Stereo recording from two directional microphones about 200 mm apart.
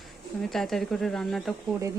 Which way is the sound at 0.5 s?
Centre (ahead or behind).